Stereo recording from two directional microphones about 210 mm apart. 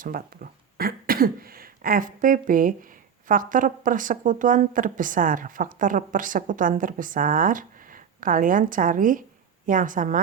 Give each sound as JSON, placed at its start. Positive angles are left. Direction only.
{"t": 0.0, "sound": "speech", "side_deg": -45}